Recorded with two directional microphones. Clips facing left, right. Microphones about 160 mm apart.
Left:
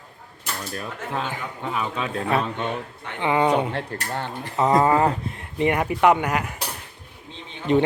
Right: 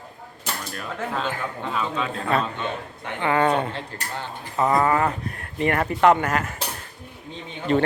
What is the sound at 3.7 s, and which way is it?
Speech, 60° left (ahead or behind).